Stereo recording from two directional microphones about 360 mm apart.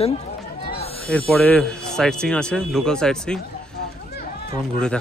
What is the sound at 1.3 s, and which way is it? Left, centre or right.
Speech, centre.